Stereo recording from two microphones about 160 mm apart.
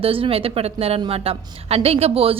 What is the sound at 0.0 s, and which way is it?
A woman's voice, 35° right (ahead or behind).